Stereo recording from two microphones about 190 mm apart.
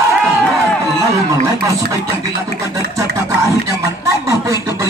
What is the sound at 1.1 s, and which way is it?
A man's voice, 15° right (ahead or behind).